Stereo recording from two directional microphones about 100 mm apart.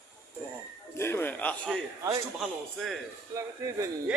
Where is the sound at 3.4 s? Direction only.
35° right (ahead or behind).